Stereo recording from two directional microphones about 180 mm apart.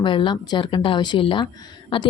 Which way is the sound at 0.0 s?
25° left (ahead or behind).